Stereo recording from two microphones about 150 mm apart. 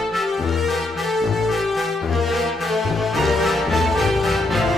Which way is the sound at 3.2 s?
Centre (ahead or behind).